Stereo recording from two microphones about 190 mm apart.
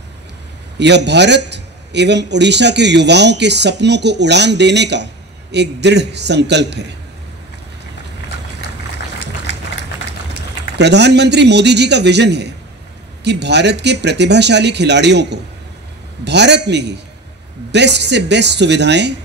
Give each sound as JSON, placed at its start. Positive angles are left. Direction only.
{"t": 0.7, "sound": "a man's voice", "side_deg": -65}
{"t": 10.8, "sound": "a man's voice", "side_deg": -65}